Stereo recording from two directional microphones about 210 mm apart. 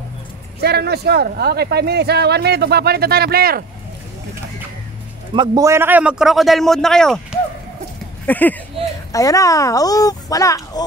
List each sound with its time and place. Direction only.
0.6 s speech: 50° right (ahead or behind)
5.3 s a man's voice: 20° right (ahead or behind); by 10.9 s 15° left (ahead or behind)